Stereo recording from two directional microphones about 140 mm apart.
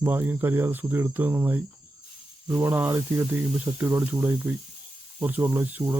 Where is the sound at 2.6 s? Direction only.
15° right (ahead or behind).